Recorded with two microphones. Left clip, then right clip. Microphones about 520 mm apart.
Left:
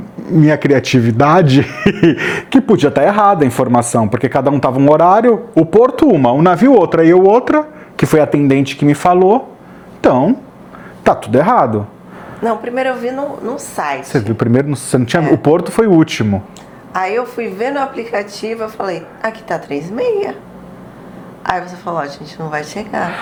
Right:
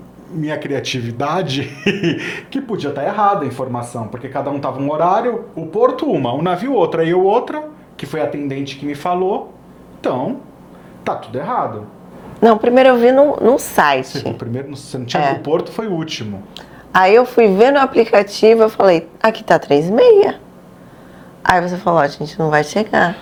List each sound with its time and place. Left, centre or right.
0.4 s speech: left
5.8 s speech: left
11.0 s speech: left
12.4 s a woman's voice: right
14.0 s speech: left
16.9 s a woman's voice: right
21.4 s a woman's voice: right